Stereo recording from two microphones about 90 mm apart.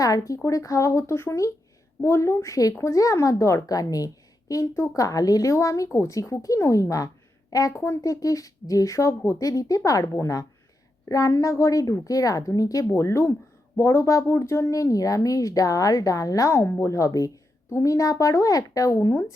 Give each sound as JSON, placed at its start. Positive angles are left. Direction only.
{"t": 0.0, "sound": "speech", "side_deg": 40}
{"t": 7.7, "sound": "speech", "side_deg": 25}
{"t": 8.0, "sound": "speech", "side_deg": 40}